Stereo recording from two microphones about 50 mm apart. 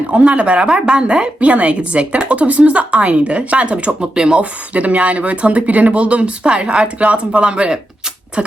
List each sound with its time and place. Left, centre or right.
0.1 s a woman's voice: right
4.4 s a woman's voice: right